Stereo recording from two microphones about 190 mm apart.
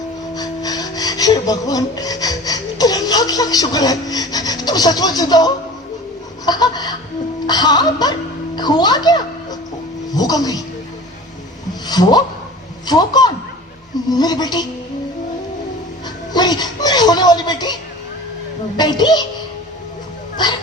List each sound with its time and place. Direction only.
0.3 s filing: 20° left (ahead or behind)
6.4 s laughter: 20° left (ahead or behind)
7.4 s speech: 20° left (ahead or behind)
11.9 s a sound: 20° left (ahead or behind)
12.9 s speech: 20° left (ahead or behind)
16.3 s speech: 20° left (ahead or behind)
18.8 s speech: 20° left (ahead or behind)
20.3 s a sound: 25° left (ahead or behind)